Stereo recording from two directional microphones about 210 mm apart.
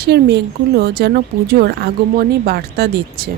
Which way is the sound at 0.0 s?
50° right (ahead or behind).